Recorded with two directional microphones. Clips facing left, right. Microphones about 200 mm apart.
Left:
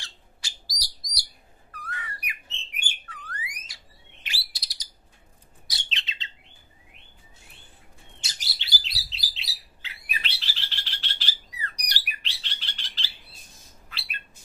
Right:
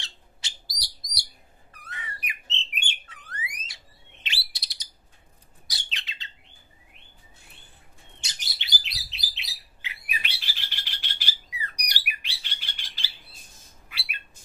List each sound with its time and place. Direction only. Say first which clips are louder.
0.0 s bird: right 1 dB; 20° right (ahead or behind)
1.7 s whistle: left 3 dB; 20° right (ahead or behind)
2.6 s bird: right 2 dB; 20° right (ahead or behind)
5.9 s bird: left 3 dB; 25° left (ahead or behind)
8.2 s chirp: even; 20° right (ahead or behind)
9.4 s bird: right 1 dB; 15° right (ahead or behind)